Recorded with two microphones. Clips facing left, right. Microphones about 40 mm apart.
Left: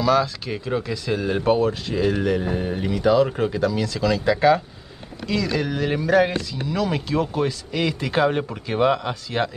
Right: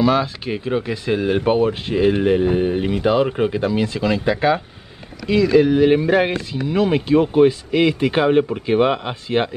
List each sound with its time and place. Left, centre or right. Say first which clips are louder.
0.0 s speech: right 2 dB; right